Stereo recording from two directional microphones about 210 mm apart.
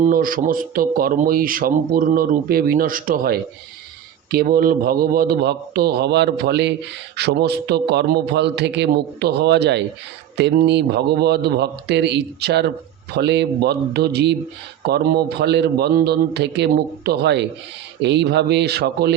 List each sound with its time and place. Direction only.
0.0 s speech: 40° right (ahead or behind)